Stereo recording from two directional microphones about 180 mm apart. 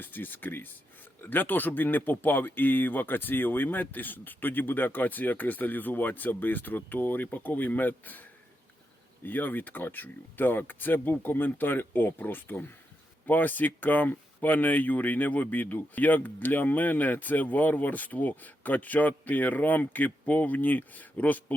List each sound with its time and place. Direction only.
0.0 s speech: 10° left (ahead or behind)